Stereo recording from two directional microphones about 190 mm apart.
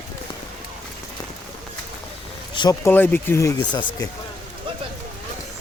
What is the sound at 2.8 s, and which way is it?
Speech, 10° left (ahead or behind).